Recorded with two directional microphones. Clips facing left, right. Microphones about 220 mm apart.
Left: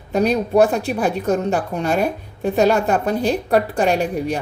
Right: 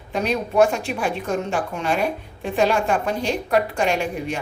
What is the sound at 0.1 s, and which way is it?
A woman's voice, 40° left (ahead or behind).